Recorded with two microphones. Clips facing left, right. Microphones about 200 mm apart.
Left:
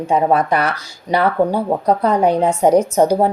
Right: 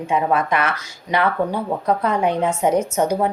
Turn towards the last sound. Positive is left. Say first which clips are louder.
# left 5 dB
turn(degrees=35)  # may be behind; listen again after turning